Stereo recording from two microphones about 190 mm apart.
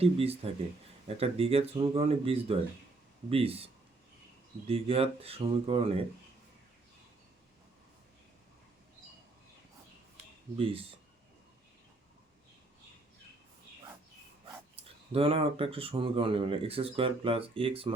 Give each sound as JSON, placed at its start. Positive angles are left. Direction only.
{"t": 0.0, "sound": "speech", "side_deg": -30}
{"t": 10.6, "sound": "speech", "side_deg": -30}
{"t": 15.1, "sound": "speech", "side_deg": -30}